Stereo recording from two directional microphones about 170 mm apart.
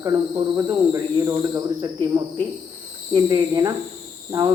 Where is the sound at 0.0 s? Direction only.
20° right (ahead or behind).